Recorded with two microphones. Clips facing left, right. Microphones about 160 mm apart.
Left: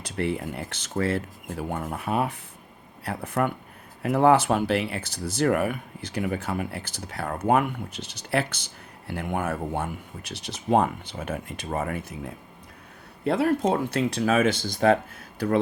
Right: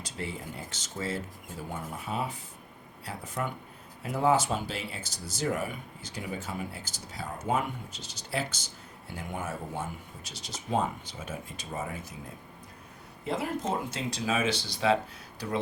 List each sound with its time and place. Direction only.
0.0 s speech: 65° left (ahead or behind)